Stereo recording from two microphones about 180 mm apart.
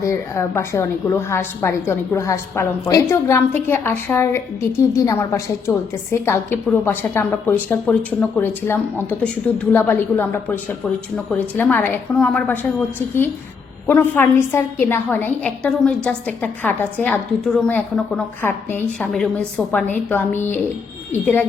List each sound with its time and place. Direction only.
0.0 s a woman's voice: 15° left (ahead or behind)
14.1 s a woman's voice: 10° left (ahead or behind)